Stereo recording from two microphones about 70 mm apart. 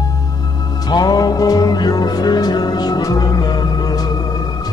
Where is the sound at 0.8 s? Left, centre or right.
Left.